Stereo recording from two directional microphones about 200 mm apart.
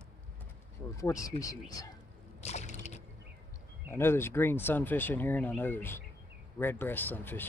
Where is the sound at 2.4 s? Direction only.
35° left (ahead or behind).